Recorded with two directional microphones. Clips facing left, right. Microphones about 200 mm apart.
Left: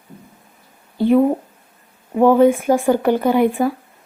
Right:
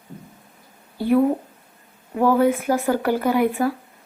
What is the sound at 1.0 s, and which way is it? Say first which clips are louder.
A woman's voice: left 4 dB; 20° left (ahead or behind).